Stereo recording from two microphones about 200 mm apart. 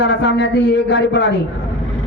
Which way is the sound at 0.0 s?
60° left (ahead or behind).